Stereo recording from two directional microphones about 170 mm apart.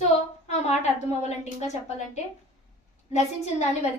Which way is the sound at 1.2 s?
40° left (ahead or behind).